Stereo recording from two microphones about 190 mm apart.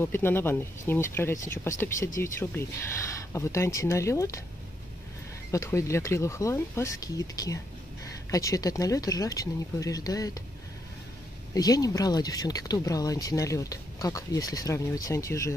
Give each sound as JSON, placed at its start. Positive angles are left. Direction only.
{"t": 0.0, "sound": "speech", "side_deg": 10}
{"t": 5.5, "sound": "speech", "side_deg": 15}
{"t": 11.5, "sound": "speech", "side_deg": 20}